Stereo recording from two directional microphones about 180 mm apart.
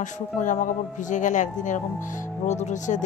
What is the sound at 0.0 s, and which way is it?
Speech, 45° left (ahead or behind).